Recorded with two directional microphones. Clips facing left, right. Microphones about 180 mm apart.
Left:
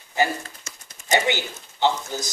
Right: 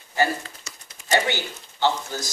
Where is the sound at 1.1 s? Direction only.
15° left (ahead or behind).